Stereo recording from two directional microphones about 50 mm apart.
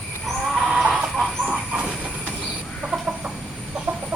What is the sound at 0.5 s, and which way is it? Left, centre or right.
Chicken, centre.